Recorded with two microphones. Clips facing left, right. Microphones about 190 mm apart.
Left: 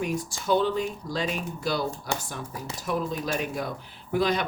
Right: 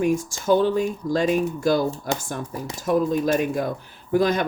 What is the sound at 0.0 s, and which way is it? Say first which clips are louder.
Speech: right 7 dB; 45° right (ahead or behind).